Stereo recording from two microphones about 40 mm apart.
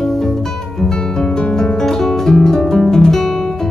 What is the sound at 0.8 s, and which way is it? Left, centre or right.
Music, centre.